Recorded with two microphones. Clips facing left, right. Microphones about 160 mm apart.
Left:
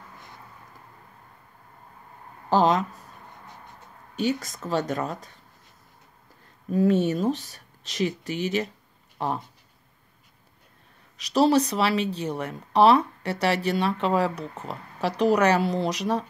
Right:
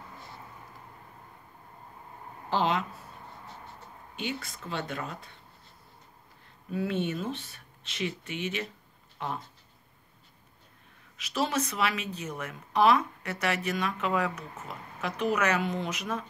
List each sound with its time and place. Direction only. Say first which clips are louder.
2.5 s speech: left 7 dB; 40° left (ahead or behind)
4.2 s speech: left 9 dB; 40° left (ahead or behind)
6.7 s speech: left 9 dB; 40° left (ahead or behind)
11.1 s speech: left 10 dB; 35° left (ahead or behind)